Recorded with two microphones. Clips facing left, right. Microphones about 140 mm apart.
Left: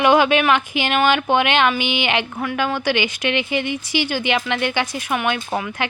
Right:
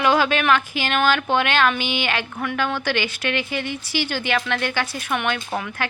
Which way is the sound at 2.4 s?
5° left (ahead or behind).